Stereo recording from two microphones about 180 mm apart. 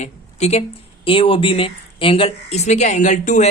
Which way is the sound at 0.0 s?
40° left (ahead or behind).